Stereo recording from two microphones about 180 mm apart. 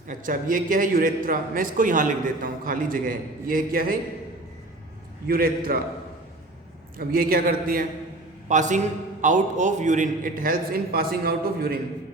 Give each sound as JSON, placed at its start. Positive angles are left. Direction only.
{"t": 0.1, "sound": "a man's voice", "side_deg": -45}
{"t": 5.3, "sound": "a man's voice", "side_deg": -55}
{"t": 7.0, "sound": "a man's voice", "side_deg": -55}
{"t": 8.4, "sound": "a man's voice", "side_deg": -40}